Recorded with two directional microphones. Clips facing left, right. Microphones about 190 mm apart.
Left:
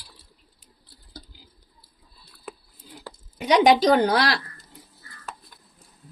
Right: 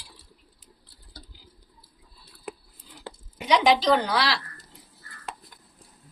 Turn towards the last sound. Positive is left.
turn(degrees=45)  # may be behind; listen again after turning